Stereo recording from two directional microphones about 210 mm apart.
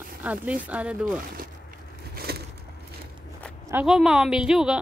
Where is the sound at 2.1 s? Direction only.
50° right (ahead or behind).